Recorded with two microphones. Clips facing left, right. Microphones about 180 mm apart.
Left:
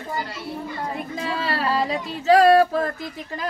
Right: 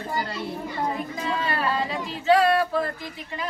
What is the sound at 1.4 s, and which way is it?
Speech, 35° left (ahead or behind).